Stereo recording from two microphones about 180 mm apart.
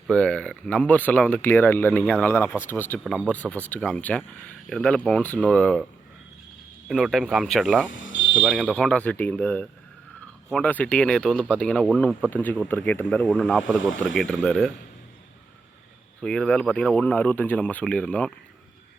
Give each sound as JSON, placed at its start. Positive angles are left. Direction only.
{"t": 0.1, "sound": "speech", "side_deg": 5}
{"t": 6.8, "sound": "speech", "side_deg": 0}
{"t": 8.0, "sound": "a sound", "side_deg": 90}
{"t": 8.4, "sound": "speech", "side_deg": 0}
{"t": 16.2, "sound": "speech", "side_deg": 5}